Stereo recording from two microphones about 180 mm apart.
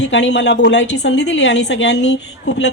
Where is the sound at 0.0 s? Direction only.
80° left.